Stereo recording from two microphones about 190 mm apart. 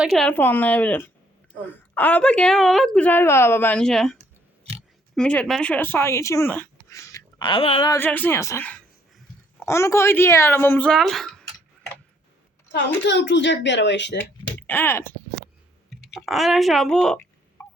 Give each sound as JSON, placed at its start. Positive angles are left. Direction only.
{"t": 0.0, "sound": "a woman's voice", "side_deg": 0}
{"t": 7.9, "sound": "a woman's voice", "side_deg": 10}
{"t": 12.7, "sound": "speech", "side_deg": 65}
{"t": 14.7, "sound": "a woman's voice", "side_deg": 10}
{"t": 15.9, "sound": "speech", "side_deg": 0}
{"t": 17.6, "sound": "a sound", "side_deg": 10}